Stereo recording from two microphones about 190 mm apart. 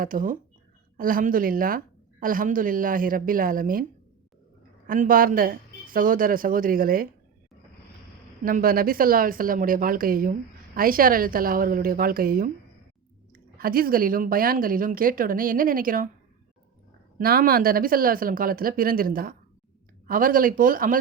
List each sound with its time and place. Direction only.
0.0 s a woman's voice: 45° right (ahead or behind)
4.9 s a woman's voice: 45° right (ahead or behind)
8.4 s a woman's voice: 50° right (ahead or behind)
17.2 s a woman's voice: 50° right (ahead or behind)